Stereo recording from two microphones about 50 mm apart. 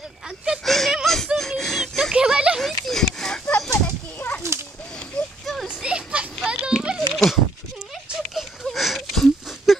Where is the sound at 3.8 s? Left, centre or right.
Left.